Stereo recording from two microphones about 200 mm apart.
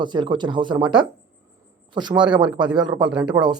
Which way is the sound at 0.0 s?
25° right (ahead or behind).